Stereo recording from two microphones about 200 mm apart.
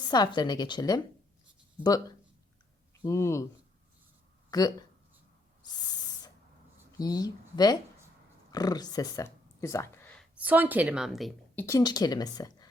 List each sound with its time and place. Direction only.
0.0 s a woman's voice: 20° left (ahead or behind)
4.5 s a woman's voice: 20° left (ahead or behind)
5.6 s owl: 20° left (ahead or behind)
7.0 s a woman's voice: 20° left (ahead or behind)
10.2 s speech: 5° right (ahead or behind)
11.6 s a woman's voice: 15° left (ahead or behind)